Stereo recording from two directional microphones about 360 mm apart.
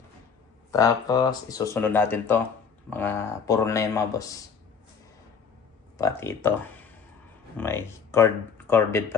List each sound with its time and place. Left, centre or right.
0.7 s speech: centre
6.0 s speech: centre